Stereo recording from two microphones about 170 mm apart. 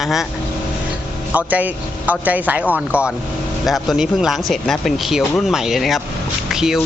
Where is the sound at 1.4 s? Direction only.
10° right (ahead or behind).